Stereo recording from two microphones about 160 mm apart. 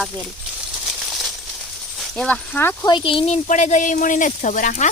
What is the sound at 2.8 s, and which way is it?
Speech, 30° left (ahead or behind).